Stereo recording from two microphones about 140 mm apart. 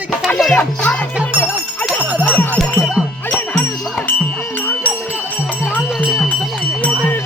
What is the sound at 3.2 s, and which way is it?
Music, 15° left (ahead or behind).